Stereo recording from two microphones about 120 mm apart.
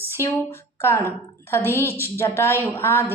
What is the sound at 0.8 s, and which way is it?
A woman's voice, 20° left (ahead or behind).